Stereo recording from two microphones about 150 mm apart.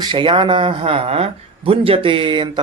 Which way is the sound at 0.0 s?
30° right (ahead or behind).